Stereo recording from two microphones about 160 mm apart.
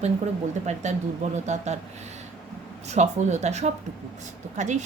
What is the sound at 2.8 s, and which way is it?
A woman's voice, 45° right (ahead or behind).